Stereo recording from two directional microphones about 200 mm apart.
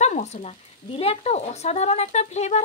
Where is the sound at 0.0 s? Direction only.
35° left (ahead or behind).